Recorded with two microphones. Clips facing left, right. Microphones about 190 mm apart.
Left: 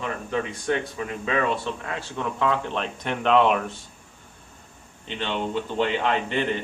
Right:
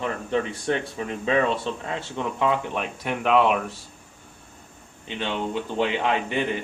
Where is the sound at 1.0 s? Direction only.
30° right (ahead or behind); by 3.6 s 5° right (ahead or behind).